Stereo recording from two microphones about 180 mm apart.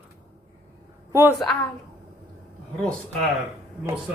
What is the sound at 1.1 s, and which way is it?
Speech, 15° right (ahead or behind).